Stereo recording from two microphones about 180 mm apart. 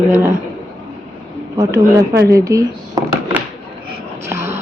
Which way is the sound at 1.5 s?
15° right (ahead or behind).